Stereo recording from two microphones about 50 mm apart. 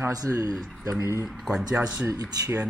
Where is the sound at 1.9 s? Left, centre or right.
Right.